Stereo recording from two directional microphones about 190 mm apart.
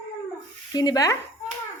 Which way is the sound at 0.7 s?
20° left (ahead or behind).